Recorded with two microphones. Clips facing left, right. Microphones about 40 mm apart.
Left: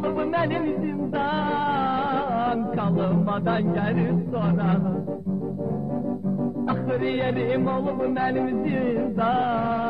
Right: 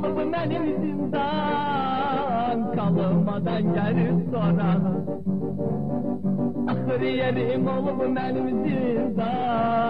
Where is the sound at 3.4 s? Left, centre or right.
Centre.